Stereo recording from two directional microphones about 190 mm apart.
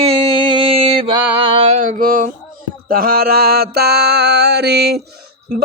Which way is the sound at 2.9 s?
50° right (ahead or behind).